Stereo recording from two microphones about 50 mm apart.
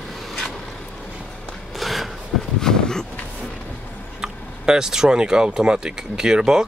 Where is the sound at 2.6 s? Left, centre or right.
Centre.